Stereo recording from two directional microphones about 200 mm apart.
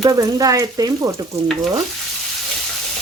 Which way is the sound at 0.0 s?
15° right (ahead or behind).